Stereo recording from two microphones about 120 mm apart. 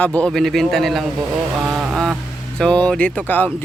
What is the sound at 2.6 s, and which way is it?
Speech, 10° left (ahead or behind).